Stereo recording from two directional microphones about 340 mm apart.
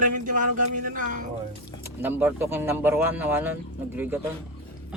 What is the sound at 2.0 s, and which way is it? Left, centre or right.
Speech, centre.